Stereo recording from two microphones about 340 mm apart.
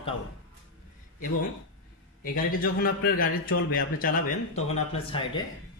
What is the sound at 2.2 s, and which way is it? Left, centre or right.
A man's voice, left.